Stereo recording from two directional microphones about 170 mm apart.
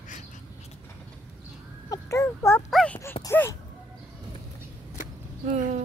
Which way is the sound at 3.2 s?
15° left (ahead or behind).